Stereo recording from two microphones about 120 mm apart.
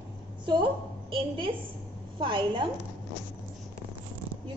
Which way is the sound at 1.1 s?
45° right (ahead or behind).